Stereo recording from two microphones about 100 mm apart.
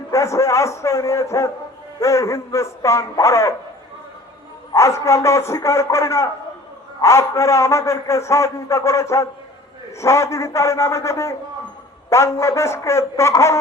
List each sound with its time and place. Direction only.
0.1 s a man's voice: 30° left (ahead or behind)
4.7 s a man's voice: 30° left (ahead or behind)